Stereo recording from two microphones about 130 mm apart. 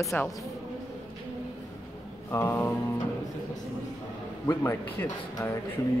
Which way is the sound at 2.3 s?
20° left (ahead or behind).